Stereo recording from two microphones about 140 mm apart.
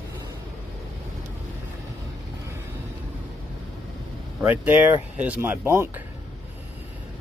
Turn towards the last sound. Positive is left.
turn(degrees=-15)  # may be behind; listen again after turning